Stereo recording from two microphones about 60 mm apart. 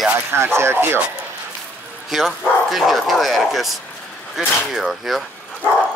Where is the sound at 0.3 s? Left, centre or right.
Right.